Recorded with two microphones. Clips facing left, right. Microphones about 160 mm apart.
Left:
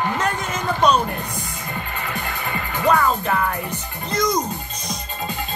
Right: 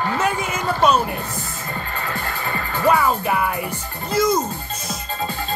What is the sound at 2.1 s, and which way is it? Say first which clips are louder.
Music: right 1 dB; 15° left (ahead or behind).